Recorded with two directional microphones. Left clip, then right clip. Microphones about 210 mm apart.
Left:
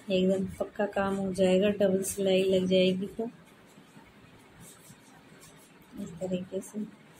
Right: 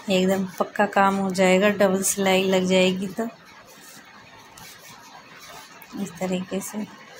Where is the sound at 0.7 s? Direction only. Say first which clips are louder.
Right 11 dB; 15° right (ahead or behind).